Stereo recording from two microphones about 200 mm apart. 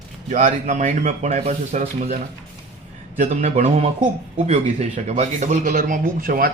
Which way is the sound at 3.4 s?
35° right (ahead or behind).